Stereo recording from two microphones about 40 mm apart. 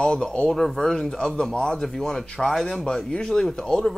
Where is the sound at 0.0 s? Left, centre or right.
Left; by 2.9 s centre.